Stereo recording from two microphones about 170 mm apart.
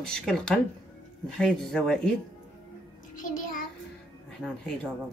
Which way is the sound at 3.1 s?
50° left (ahead or behind).